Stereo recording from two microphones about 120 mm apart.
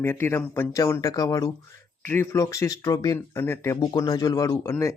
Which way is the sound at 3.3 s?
20° left (ahead or behind).